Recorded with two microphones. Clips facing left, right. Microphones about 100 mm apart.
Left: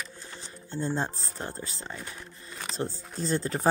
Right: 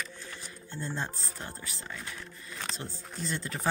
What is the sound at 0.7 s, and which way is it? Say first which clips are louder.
A woman's voice: left 6 dB; 30° left (ahead or behind).